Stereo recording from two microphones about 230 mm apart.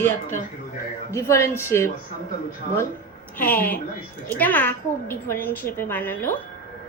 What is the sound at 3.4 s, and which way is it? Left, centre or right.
A woman's voice, centre.